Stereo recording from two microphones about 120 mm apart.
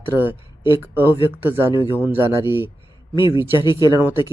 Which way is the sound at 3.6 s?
40° left (ahead or behind).